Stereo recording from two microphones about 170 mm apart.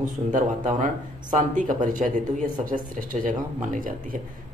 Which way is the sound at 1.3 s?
50° right (ahead or behind).